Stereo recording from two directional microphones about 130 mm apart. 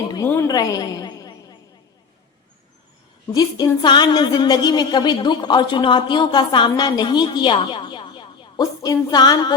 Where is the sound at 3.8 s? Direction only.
35° left (ahead or behind).